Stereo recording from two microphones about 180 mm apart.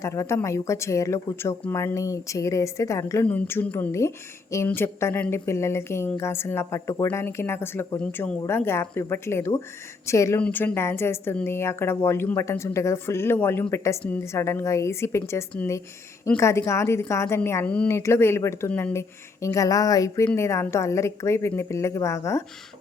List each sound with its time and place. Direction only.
0.0 s a woman's voice: 15° left (ahead or behind)